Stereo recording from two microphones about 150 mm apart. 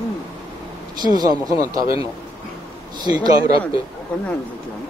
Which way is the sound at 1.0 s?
25° right (ahead or behind).